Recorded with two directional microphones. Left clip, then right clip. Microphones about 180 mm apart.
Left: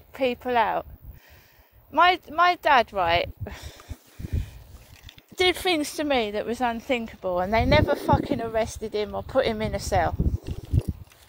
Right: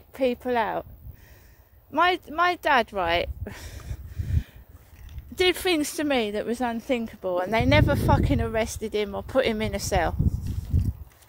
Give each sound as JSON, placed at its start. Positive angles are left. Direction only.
{"t": 0.1, "sound": "speech", "side_deg": -45}
{"t": 1.9, "sound": "speech", "side_deg": -50}
{"t": 5.3, "sound": "a woman's voice", "side_deg": -30}